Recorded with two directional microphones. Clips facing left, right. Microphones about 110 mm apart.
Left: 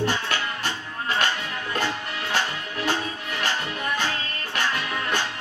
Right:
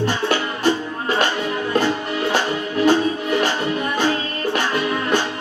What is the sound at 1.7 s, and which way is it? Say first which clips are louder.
Music: right 7 dB; 20° right (ahead or behind).